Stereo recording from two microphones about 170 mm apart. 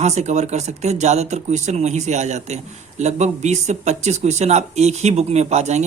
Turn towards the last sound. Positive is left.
turn(degrees=-40)  # may be behind; listen again after turning